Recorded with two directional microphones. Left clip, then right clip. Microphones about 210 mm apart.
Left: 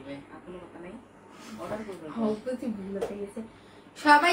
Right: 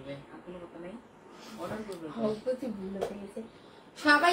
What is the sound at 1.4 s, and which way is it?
Speech, 25° left (ahead or behind).